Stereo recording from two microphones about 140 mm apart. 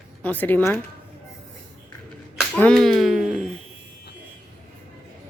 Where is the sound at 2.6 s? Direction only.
5° left (ahead or behind).